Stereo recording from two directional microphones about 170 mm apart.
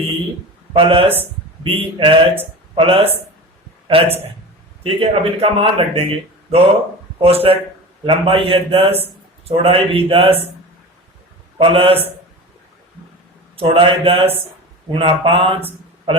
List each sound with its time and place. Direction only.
0.7 s speech: 30° right (ahead or behind)
11.5 s speech: 35° right (ahead or behind)
13.6 s speech: 35° right (ahead or behind)